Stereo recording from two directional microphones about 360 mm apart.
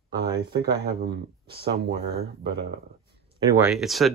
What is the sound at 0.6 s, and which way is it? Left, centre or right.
Speech, right.